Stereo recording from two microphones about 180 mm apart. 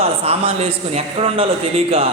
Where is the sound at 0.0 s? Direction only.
35° right (ahead or behind).